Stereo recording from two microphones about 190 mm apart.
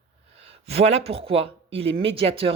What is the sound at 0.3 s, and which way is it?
A woman's voice, 30° right (ahead or behind).